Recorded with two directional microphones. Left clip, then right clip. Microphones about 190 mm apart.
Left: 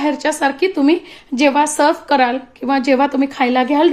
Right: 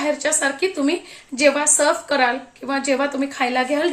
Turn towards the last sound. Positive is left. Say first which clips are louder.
# left 6 dB
turn(degrees=45)  # may be behind; listen again after turning